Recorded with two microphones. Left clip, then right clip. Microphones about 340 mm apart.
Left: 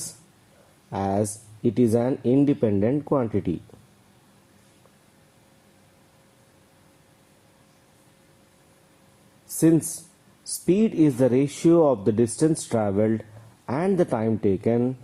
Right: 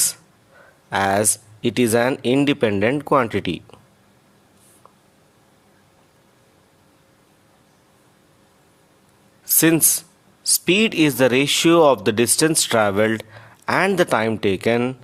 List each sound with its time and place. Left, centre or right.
0.9 s speech: right
9.6 s speech: right